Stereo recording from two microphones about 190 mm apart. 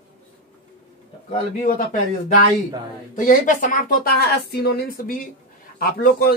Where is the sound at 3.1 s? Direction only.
45° left (ahead or behind).